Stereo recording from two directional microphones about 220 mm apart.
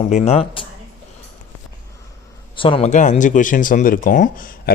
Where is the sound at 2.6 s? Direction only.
25° left (ahead or behind).